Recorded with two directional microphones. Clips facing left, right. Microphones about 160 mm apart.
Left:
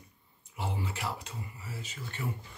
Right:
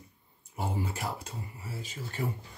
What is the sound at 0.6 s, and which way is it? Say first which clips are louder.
Speech: right 3 dB; 45° right (ahead or behind).